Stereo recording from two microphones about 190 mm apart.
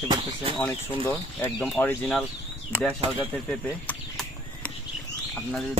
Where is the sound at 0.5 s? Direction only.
10° left (ahead or behind).